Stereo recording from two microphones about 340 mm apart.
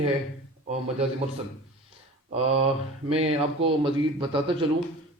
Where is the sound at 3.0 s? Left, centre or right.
Centre.